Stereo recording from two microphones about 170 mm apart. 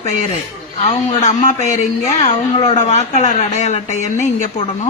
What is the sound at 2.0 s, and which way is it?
A woman's voice, 40° left (ahead or behind).